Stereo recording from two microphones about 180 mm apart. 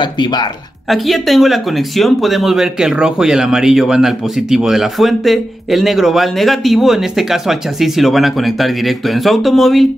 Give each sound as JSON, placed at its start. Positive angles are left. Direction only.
{"t": 0.0, "sound": "speech", "side_deg": 25}
{"t": 0.8, "sound": "speech", "side_deg": 0}